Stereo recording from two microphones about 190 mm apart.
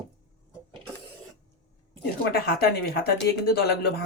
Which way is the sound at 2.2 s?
55° left (ahead or behind).